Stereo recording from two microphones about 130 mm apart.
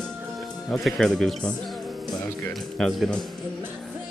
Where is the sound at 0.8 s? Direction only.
Centre (ahead or behind).